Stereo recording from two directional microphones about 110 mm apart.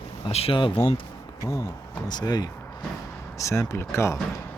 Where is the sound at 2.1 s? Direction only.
35° left (ahead or behind).